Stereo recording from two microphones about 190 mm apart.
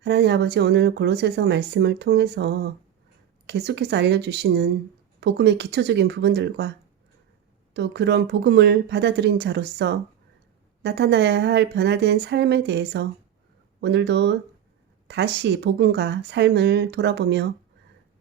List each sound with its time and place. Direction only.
0.0 s speech: 60° right (ahead or behind)